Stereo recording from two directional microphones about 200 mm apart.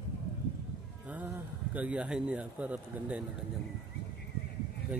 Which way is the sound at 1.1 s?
10° right (ahead or behind).